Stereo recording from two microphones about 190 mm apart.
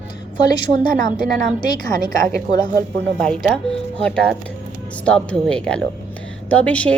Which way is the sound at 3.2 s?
5° left (ahead or behind).